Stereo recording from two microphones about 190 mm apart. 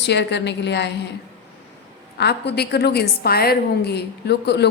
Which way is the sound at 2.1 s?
60° left (ahead or behind).